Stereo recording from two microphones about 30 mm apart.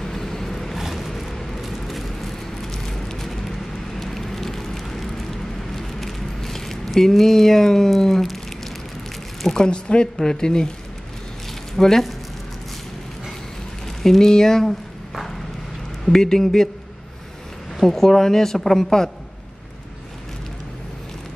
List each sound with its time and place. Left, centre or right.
0.0 s vehicle: centre
0.7 s a sound: centre
1.2 s vehicle: centre
1.6 s a sound: centre
8.0 s a woman's voice: centre
9.7 s speech: left
10.2 s speech: left
11.7 s speech: centre
14.0 s a woman's voice: centre
16.1 s a woman's voice: centre
17.8 s a woman's voice: centre